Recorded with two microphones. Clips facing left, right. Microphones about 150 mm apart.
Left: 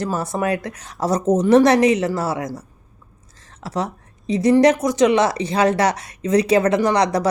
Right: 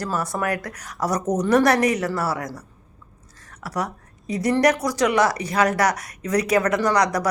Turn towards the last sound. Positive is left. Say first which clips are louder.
# left 3 dB
turn(degrees=25)  # may be behind; listen again after turning